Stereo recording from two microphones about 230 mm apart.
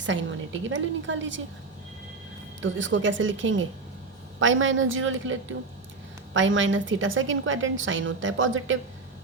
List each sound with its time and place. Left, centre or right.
0.0 s a woman's voice: right
2.6 s a woman's voice: right